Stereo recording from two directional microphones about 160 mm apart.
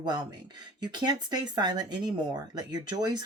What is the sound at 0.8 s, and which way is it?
Speech, 25° right (ahead or behind).